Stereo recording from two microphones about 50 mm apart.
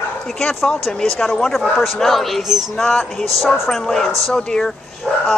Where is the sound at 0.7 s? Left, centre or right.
Centre.